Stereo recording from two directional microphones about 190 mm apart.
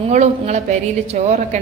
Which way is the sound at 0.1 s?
35° right (ahead or behind).